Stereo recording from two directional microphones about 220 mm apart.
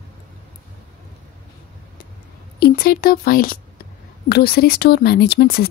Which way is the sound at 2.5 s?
45° left (ahead or behind).